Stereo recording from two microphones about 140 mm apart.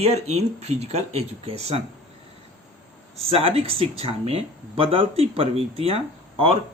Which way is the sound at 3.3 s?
45° right (ahead or behind).